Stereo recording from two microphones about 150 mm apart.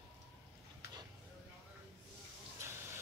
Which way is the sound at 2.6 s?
15° right (ahead or behind).